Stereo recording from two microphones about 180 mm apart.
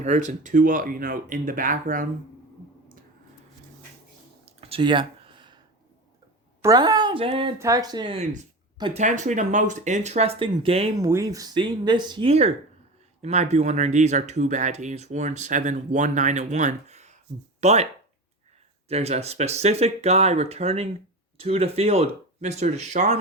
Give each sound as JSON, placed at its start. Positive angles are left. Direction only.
{"t": 0.0, "sound": "speech", "side_deg": -40}
{"t": 4.4, "sound": "a sound", "side_deg": -35}
{"t": 6.6, "sound": "a woman's voice", "side_deg": -20}
{"t": 7.6, "sound": "speech", "side_deg": -20}
{"t": 11.0, "sound": "speech", "side_deg": -20}
{"t": 18.9, "sound": "speech", "side_deg": -35}